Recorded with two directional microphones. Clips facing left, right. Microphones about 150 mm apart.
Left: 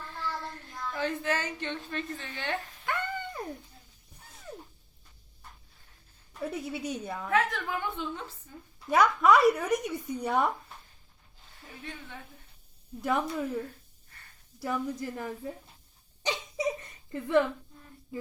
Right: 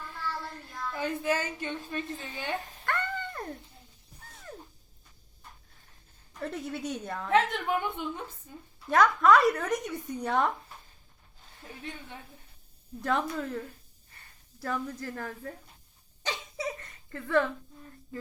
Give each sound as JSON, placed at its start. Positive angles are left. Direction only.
{"t": 0.9, "sound": "a woman's voice", "side_deg": -10}
{"t": 2.8, "sound": "a sound", "side_deg": 10}
{"t": 4.3, "sound": "cat", "side_deg": 5}
{"t": 6.4, "sound": "a woman's voice", "side_deg": 5}
{"t": 7.3, "sound": "a woman's voice", "side_deg": -25}
{"t": 8.9, "sound": "speech", "side_deg": 10}
{"t": 13.0, "sound": "speech", "side_deg": 10}
{"t": 16.2, "sound": "hiccup", "side_deg": 15}